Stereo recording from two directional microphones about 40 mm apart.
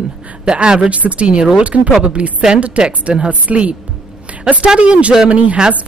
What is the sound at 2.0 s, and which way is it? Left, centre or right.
A woman's voice, right.